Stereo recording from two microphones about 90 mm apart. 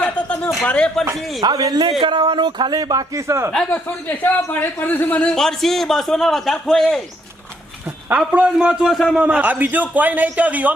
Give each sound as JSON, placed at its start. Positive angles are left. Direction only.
{"t": 0.0, "sound": "a sound", "side_deg": 20}
{"t": 0.6, "sound": "speech", "side_deg": 15}
{"t": 1.4, "sound": "a man's voice", "side_deg": -45}
{"t": 2.0, "sound": "a man's voice", "side_deg": -60}
{"t": 3.5, "sound": "speech", "side_deg": 10}
{"t": 5.3, "sound": "a man's voice", "side_deg": 5}
{"t": 8.5, "sound": "a man's voice", "side_deg": -5}